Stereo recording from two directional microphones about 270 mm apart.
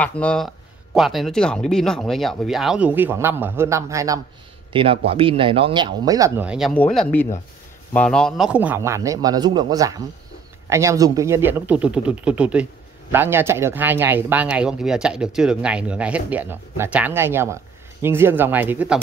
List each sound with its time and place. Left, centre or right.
0.0 s speech: centre